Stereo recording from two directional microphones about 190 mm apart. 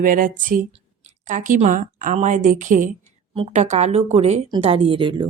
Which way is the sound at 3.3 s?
30° right (ahead or behind).